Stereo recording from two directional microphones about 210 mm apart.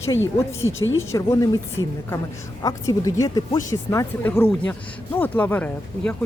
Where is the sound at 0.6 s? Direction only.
70° left (ahead or behind).